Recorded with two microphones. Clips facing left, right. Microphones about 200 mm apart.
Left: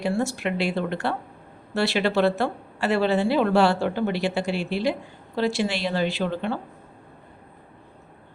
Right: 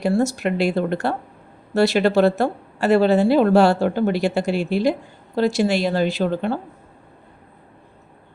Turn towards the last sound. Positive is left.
turn(degrees=-40)  # may be behind; listen again after turning